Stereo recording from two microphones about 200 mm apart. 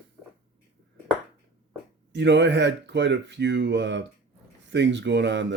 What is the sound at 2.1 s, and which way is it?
Speech, 60° right (ahead or behind).